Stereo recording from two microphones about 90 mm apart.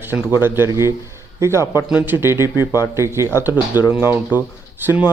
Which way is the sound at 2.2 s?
30° right (ahead or behind).